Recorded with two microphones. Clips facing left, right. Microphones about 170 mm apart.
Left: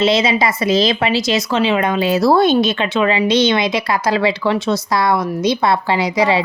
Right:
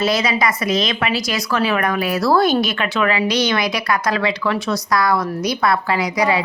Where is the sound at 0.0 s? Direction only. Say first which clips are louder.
Left 3 dB; 25° left (ahead or behind).